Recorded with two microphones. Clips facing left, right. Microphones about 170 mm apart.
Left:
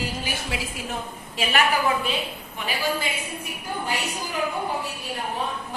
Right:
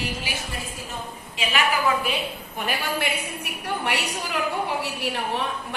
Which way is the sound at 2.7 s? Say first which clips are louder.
Even; 65° right (ahead or behind).